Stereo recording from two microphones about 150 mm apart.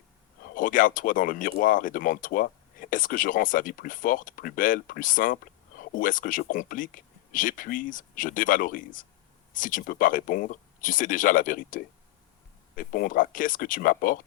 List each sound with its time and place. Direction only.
0.5 s speech: 65° left (ahead or behind)